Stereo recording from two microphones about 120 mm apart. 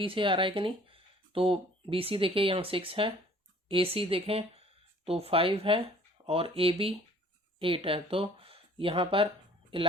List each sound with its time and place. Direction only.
0.0 s speech: 45° right (ahead or behind)